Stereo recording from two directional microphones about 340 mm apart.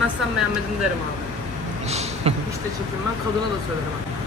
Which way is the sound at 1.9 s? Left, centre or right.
Centre.